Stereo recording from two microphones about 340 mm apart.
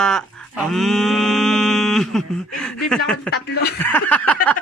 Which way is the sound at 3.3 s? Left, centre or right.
Left.